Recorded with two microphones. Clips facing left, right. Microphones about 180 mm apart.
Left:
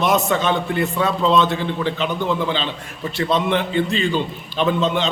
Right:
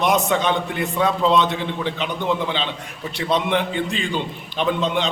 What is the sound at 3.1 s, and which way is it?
A man's voice, 15° right (ahead or behind).